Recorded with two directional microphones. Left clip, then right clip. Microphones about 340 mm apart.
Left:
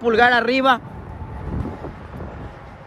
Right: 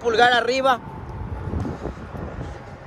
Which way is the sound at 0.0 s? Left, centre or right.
Centre.